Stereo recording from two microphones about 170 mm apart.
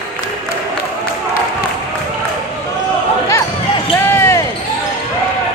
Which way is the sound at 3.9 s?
15° left (ahead or behind).